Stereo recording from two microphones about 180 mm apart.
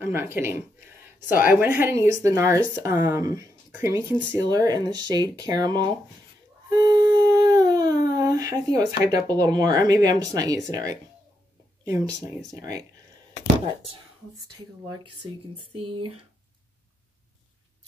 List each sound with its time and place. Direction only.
0.0 s speech: 10° right (ahead or behind)
15.7 s speech: 30° right (ahead or behind)